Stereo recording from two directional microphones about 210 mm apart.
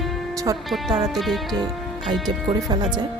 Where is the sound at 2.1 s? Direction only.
20° right (ahead or behind).